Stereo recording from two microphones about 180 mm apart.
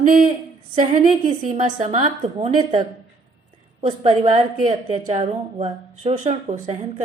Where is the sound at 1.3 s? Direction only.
30° right (ahead or behind).